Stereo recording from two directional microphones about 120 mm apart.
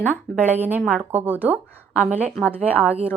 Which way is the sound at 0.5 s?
15° right (ahead or behind).